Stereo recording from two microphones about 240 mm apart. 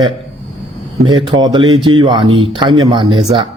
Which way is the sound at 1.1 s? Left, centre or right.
Centre.